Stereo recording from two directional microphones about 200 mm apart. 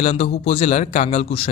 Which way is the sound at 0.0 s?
30° left (ahead or behind).